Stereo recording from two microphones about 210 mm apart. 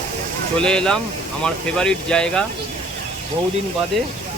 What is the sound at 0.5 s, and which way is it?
Speech, 5° left (ahead or behind).